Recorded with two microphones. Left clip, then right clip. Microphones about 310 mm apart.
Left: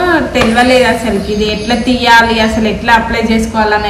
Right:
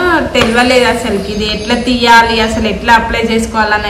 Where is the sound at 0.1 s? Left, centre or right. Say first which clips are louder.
Even; centre.